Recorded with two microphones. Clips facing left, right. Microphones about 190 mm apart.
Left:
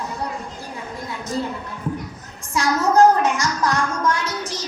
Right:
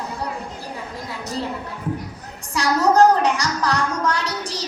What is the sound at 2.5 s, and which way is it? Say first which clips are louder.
Music: right 1 dB; 35° right (ahead or behind).